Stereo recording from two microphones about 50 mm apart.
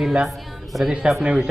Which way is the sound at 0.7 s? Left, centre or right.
Centre.